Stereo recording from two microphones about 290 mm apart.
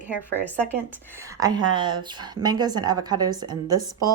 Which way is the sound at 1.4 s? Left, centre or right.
Centre.